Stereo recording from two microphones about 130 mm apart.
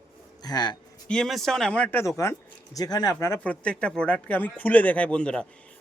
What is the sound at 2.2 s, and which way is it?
Speech, 20° left (ahead or behind).